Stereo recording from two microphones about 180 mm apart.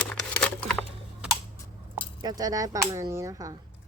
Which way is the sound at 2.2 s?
20° right (ahead or behind).